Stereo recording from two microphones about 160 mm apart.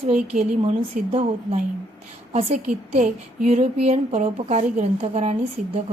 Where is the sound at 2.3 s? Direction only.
40° right (ahead or behind).